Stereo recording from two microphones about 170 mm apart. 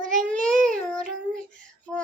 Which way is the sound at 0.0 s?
50° right (ahead or behind).